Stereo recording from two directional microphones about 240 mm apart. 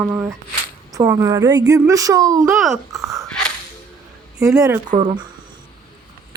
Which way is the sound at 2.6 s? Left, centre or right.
Centre.